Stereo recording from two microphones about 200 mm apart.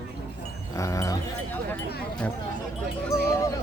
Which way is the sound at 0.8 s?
15° left (ahead or behind).